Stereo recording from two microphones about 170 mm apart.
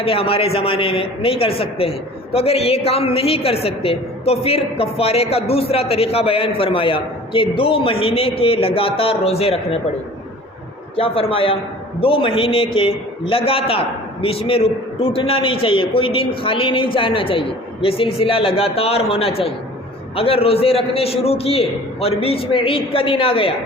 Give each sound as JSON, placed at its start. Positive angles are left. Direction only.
{"t": 0.0, "sound": "a woman's voice", "side_deg": 35}
{"t": 10.9, "sound": "a woman's voice", "side_deg": 35}